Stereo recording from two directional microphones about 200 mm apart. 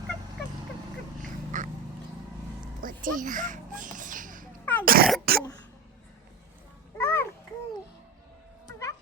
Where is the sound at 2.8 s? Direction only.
40° right (ahead or behind).